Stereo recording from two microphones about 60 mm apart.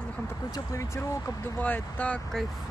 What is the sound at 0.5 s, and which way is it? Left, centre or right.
Speech, left.